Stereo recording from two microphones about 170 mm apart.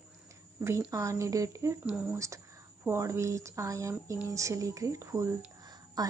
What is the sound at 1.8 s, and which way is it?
Speech, 5° right (ahead or behind).